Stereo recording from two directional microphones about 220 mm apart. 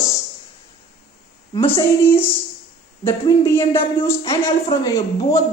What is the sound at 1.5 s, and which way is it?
Speech, 15° left (ahead or behind).